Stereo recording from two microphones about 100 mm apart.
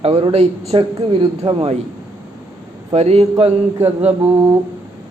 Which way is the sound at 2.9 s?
90° right.